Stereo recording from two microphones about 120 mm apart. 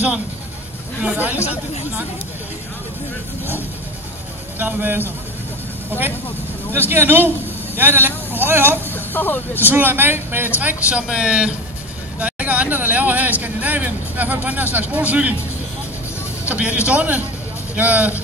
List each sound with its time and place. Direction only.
1.0 s speech: 15° right (ahead or behind)
1.4 s speech: 65° left (ahead or behind)
4.6 s a man's voice: 15° right (ahead or behind)
8.9 s speech: 15° left (ahead or behind)
9.6 s speech: 15° right (ahead or behind)
12.2 s vehicle: 10° right (ahead or behind)
16.4 s speech: 10° right (ahead or behind)